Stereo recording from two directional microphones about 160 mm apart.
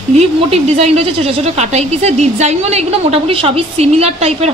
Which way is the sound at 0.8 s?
40° right (ahead or behind).